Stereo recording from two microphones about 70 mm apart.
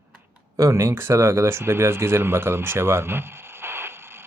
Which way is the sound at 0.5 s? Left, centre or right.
Right.